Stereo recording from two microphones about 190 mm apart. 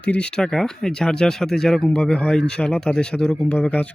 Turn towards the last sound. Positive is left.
turn(degrees=5)  # may be behind; listen again after turning